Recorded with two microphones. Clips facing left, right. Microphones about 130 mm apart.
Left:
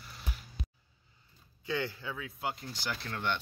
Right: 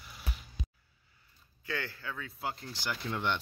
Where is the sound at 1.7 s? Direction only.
15° left (ahead or behind).